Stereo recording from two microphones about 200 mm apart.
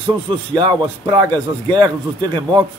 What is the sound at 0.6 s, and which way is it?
A man's voice, 25° right (ahead or behind).